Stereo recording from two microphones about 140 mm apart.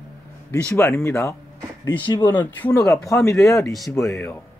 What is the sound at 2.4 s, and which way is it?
Speech, 15° left (ahead or behind).